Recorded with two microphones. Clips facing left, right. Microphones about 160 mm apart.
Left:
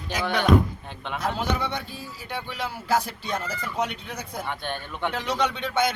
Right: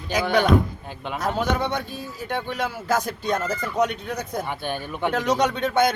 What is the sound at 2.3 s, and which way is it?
Speech, 50° right (ahead or behind).